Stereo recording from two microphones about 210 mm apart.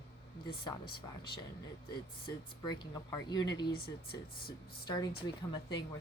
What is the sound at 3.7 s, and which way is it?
Speech, 45° left (ahead or behind).